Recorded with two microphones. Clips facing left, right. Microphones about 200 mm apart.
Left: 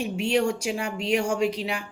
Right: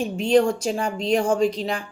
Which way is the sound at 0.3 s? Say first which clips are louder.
Right 7 dB; 10° left (ahead or behind).